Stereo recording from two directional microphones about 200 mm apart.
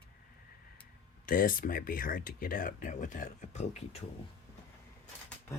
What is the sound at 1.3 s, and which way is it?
Speech, 45° left (ahead or behind).